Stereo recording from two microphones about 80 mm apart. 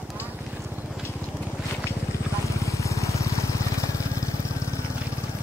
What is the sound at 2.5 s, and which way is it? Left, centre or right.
Vehicle, left.